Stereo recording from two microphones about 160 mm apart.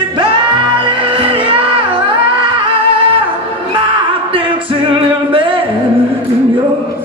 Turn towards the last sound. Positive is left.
turn(degrees=-30)  # may be behind; listen again after turning